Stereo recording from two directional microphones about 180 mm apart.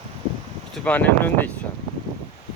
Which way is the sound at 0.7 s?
10° left (ahead or behind).